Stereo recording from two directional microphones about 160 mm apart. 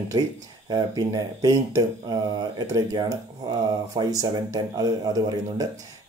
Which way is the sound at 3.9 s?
20° right (ahead or behind).